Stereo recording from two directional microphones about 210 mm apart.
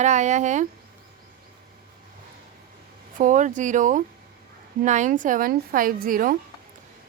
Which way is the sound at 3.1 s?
35° right (ahead or behind).